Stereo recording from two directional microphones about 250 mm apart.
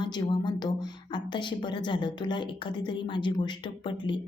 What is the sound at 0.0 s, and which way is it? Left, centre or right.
Speech, centre.